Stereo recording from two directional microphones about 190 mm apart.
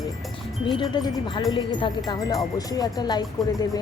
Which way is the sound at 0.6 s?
25° left (ahead or behind).